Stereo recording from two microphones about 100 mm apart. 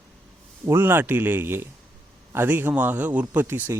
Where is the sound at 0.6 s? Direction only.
25° right (ahead or behind).